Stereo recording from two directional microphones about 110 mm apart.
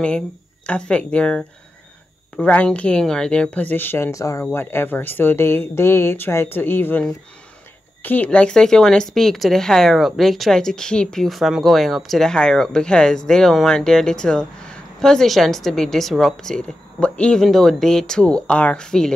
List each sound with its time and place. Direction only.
0.7 s speech: 10° left (ahead or behind)